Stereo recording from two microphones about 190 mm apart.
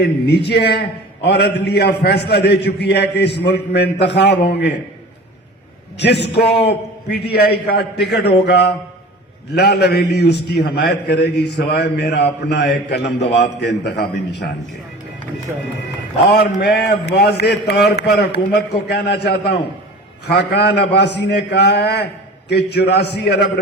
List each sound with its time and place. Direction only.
0.0 s a man's voice: 60° left (ahead or behind)
6.0 s a man's voice: 60° left (ahead or behind)
16.3 s a man's voice: 55° left (ahead or behind)